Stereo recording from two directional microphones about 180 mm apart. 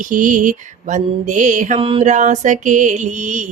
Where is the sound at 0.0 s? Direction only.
45° right (ahead or behind).